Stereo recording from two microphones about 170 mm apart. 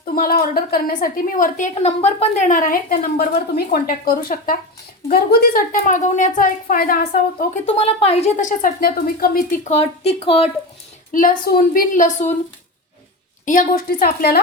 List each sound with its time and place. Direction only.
0.0 s a woman's voice: 60° left (ahead or behind)
7.7 s a woman's voice: 40° left (ahead or behind); by 9.6 s 60° left (ahead or behind)
9.6 s speech: 40° left (ahead or behind)
11.1 s a woman's voice: 55° left (ahead or behind)
13.4 s a woman's voice: 50° left (ahead or behind)